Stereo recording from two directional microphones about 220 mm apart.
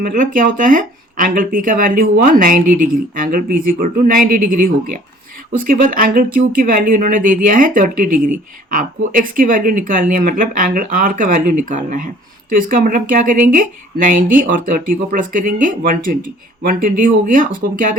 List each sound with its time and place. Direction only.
0.0 s speech: 40° right (ahead or behind)